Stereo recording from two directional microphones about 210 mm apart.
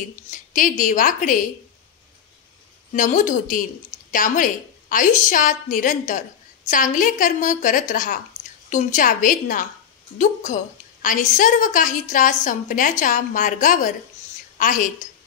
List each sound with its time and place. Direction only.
0.3 s a woman's voice: 40° left (ahead or behind)
2.9 s a woman's voice: 40° left (ahead or behind)